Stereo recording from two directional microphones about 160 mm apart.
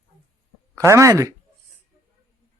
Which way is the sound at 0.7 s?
20° right (ahead or behind).